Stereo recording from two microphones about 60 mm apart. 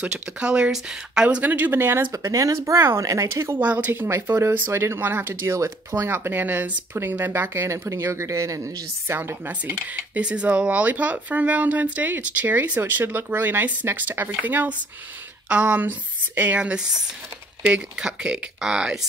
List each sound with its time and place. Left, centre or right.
0.0 s speech: centre
1.4 s speech: right
2.1 s speech: right
3.5 s speech: right
4.1 s speech: right
5.5 s speech: right
9.5 s speech: right